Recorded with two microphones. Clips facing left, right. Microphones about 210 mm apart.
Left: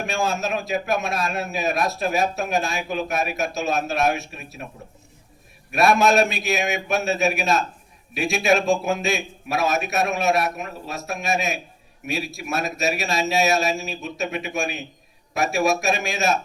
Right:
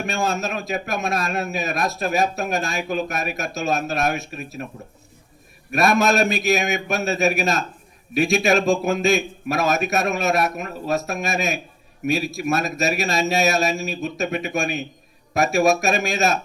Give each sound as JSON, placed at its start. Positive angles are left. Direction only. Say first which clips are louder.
{"t": 0.1, "sound": "a man's voice", "louder": "left 1 dB", "side_deg": -45}
{"t": 5.7, "sound": "a man's voice", "louder": "left 1 dB", "side_deg": -45}